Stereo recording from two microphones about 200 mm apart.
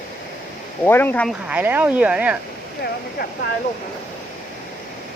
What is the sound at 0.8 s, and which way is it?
Speech, 10° left (ahead or behind).